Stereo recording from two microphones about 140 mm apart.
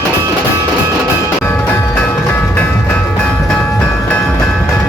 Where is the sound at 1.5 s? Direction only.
20° left (ahead or behind).